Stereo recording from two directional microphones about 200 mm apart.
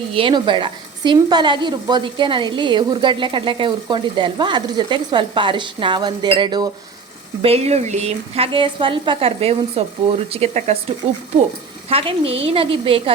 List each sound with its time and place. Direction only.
0.1 s a woman's voice: 25° right (ahead or behind)
11.9 s a woman's voice: 30° right (ahead or behind)